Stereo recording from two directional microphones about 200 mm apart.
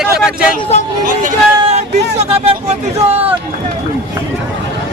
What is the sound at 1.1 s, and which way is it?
Speech, 40° right (ahead or behind).